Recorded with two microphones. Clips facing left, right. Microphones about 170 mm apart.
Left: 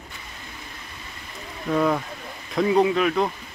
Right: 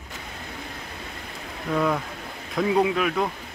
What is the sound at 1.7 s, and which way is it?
Speech, centre (ahead or behind).